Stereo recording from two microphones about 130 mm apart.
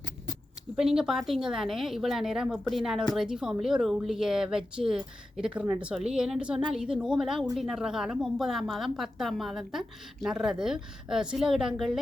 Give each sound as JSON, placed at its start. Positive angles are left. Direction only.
{"t": 0.8, "sound": "a woman's voice", "side_deg": -5}